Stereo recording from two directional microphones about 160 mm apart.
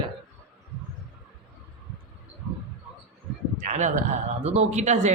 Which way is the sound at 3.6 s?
50° right (ahead or behind).